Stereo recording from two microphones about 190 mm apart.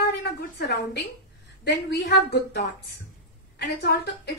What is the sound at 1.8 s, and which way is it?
A woman's voice, 60° left (ahead or behind).